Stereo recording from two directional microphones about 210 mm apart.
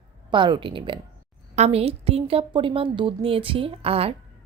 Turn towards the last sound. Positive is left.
turn(degrees=-30)  # may be behind; listen again after turning